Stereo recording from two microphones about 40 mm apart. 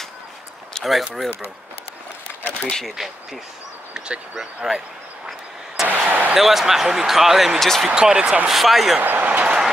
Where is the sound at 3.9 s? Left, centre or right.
Right.